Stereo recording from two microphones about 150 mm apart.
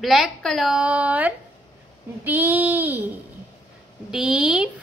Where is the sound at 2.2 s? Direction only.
10° right (ahead or behind).